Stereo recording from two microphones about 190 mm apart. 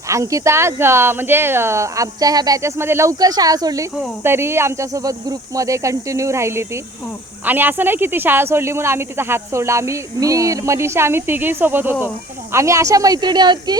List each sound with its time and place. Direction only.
0.1 s speech: 15° right (ahead or behind)